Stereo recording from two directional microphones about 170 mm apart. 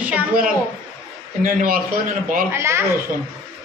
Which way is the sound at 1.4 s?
55° right (ahead or behind).